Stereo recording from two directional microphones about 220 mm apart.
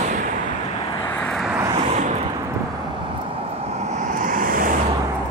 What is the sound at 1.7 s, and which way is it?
Vehicle, 30° right (ahead or behind).